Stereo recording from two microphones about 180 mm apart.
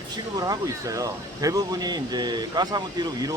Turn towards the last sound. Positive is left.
turn(degrees=-20)  # may be behind; listen again after turning